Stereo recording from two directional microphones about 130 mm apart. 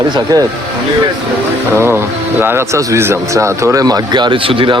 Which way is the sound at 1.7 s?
20° right (ahead or behind).